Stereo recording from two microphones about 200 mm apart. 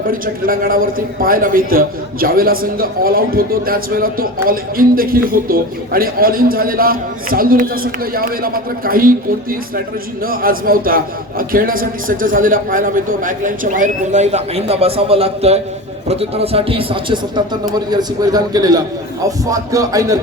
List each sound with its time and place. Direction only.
0.1 s a man's voice: 45° right (ahead or behind); by 20.1 s 15° right (ahead or behind)